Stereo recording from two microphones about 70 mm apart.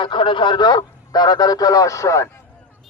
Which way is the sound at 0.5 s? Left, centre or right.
Left.